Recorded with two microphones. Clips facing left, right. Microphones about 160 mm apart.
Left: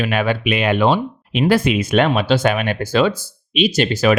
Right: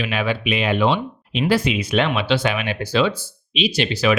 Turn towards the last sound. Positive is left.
turn(degrees=45)  # may be behind; listen again after turning